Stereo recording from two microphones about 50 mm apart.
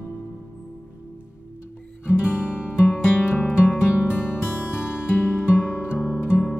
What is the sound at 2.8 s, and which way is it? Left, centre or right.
Music, left.